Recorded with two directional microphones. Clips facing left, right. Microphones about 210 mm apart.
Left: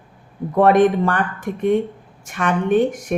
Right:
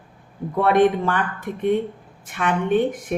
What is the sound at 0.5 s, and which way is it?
Speech, 45° left (ahead or behind).